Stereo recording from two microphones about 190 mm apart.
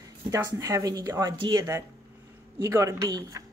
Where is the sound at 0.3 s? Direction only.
15° right (ahead or behind).